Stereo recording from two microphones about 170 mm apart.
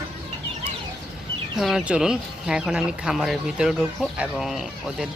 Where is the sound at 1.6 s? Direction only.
Centre (ahead or behind).